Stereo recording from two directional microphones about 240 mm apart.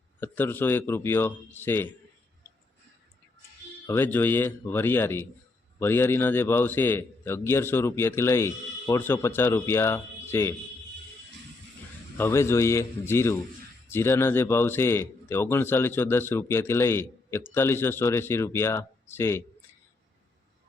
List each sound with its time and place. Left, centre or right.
0.2 s a man's voice: centre
3.8 s a man's voice: centre
12.1 s a man's voice: centre